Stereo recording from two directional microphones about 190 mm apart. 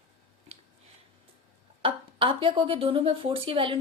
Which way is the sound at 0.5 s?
35° right (ahead or behind).